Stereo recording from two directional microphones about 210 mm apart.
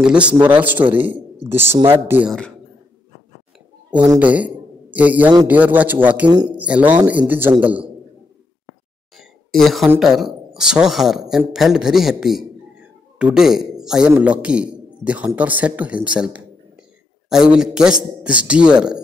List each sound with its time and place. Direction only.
0.0 s a man's voice: 5° right (ahead or behind)
4.2 s speech: 5° right (ahead or behind)
6.5 s speech: 5° right (ahead or behind)
9.1 s a sound: centre (ahead or behind)
9.8 s a man's voice: centre (ahead or behind)